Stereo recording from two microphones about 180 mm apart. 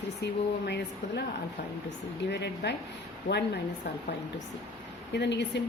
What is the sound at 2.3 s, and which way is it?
Speech, 70° left (ahead or behind).